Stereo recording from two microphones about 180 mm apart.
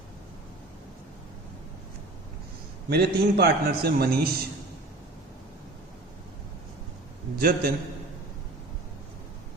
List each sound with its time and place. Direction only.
2.9 s a man's voice: 60° right (ahead or behind)
7.3 s a man's voice: 55° right (ahead or behind)